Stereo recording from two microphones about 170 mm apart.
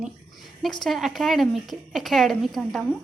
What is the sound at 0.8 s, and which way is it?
A woman's voice, centre (ahead or behind).